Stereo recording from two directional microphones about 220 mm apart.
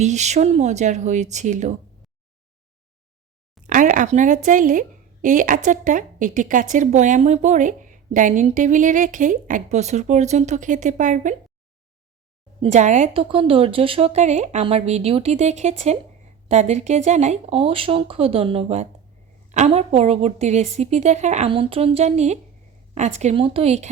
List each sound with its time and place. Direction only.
0.0 s a woman's voice: 30° right (ahead or behind)
3.7 s a woman's voice: 35° right (ahead or behind)
12.7 s a woman's voice: 30° right (ahead or behind)